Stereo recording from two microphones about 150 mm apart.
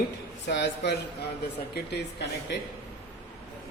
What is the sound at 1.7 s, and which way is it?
Speech, 90° left.